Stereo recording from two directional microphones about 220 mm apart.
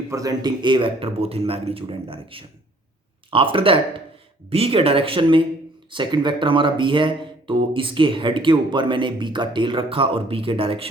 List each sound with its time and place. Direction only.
0.1 s speech: 15° right (ahead or behind)